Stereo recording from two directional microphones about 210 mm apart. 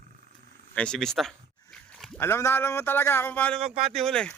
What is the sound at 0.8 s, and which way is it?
Speech, 5° left (ahead or behind).